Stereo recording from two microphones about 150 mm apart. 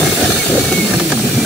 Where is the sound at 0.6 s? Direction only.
Centre (ahead or behind).